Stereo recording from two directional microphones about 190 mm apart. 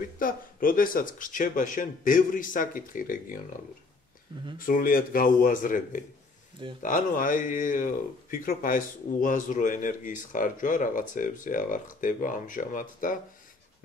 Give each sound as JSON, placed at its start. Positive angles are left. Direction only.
{"t": 0.2, "sound": "speech", "side_deg": 45}
{"t": 4.6, "sound": "speech", "side_deg": 45}